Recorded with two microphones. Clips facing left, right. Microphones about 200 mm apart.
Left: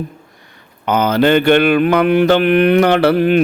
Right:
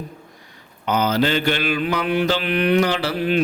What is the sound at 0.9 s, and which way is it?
Mantra, 55° left (ahead or behind).